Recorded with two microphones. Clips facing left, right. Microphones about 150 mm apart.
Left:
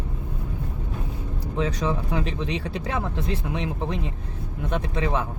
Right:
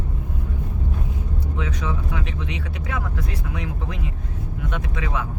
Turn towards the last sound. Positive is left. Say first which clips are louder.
# left 3 dB
turn(degrees=30)  # may be behind; listen again after turning